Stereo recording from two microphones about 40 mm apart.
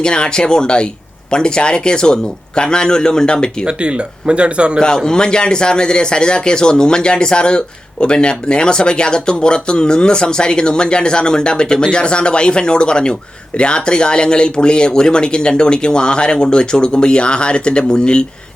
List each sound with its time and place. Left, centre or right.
0.0 s speech: left
3.7 s speech: right
4.9 s speech: centre